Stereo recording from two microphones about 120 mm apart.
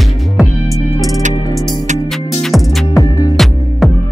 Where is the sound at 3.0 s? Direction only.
25° left (ahead or behind).